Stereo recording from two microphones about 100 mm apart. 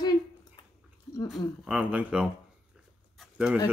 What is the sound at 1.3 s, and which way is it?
Speech, 5° right (ahead or behind).